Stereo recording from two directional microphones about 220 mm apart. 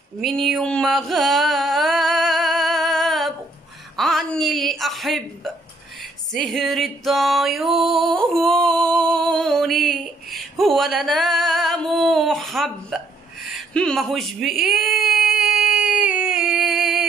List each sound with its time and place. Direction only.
0.2 s mantra: centre (ahead or behind)
3.9 s a sound: centre (ahead or behind)
6.3 s music: centre (ahead or behind)
8.4 s female singing: centre (ahead or behind)
13.5 s baby cry: centre (ahead or behind)